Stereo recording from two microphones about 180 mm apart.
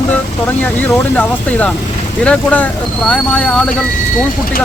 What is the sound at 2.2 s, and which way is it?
Speech, 5° left (ahead or behind).